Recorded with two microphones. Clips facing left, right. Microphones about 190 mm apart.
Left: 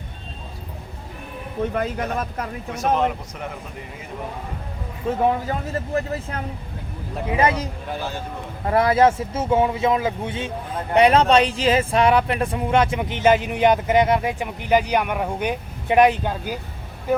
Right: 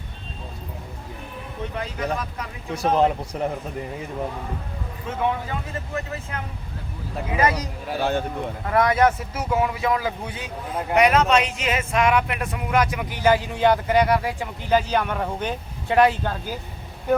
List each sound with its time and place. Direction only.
1.7 s speech: 50° left (ahead or behind)
2.7 s speech: 30° right (ahead or behind)
5.0 s speech: 40° left (ahead or behind)
7.3 s speech: 25° left (ahead or behind)
7.9 s speech: 60° right (ahead or behind)
8.6 s speech: 30° left (ahead or behind); by 16.6 s 15° left (ahead or behind)